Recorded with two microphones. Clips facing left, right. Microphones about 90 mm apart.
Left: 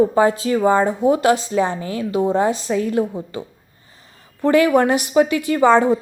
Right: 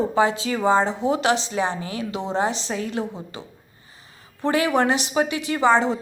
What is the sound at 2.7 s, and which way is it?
Speech, 40° left (ahead or behind).